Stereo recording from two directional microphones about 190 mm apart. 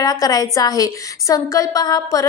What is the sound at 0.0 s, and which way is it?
A woman's voice, 20° left (ahead or behind).